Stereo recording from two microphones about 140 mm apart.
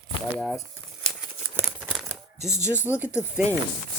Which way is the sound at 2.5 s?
20° left (ahead or behind).